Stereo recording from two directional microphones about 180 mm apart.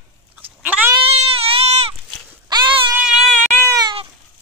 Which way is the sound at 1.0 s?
35° right (ahead or behind).